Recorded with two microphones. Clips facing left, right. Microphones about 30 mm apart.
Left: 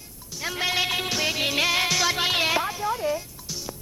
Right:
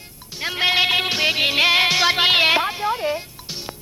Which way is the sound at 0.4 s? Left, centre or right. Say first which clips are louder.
Right 7 dB; right.